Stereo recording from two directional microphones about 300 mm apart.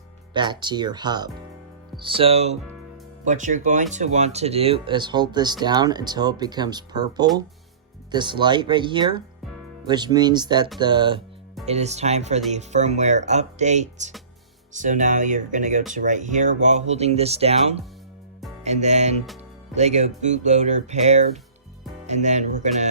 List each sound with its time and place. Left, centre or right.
0.3 s speech: centre